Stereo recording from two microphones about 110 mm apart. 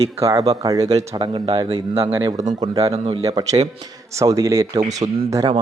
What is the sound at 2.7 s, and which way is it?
Speech, 65° right (ahead or behind).